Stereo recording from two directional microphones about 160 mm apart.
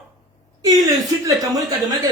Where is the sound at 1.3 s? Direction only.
20° right (ahead or behind).